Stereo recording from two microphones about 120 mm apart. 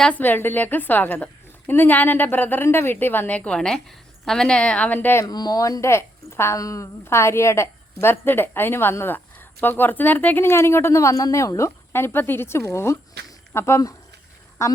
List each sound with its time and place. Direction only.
0.0 s a woman's voice: 15° left (ahead or behind)
5.2 s a woman's voice: 35° left (ahead or behind)